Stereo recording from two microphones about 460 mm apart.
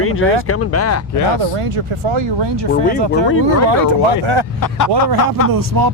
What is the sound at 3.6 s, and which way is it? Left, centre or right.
Speech, right.